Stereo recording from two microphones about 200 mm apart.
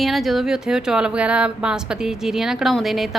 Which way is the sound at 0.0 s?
Centre (ahead or behind).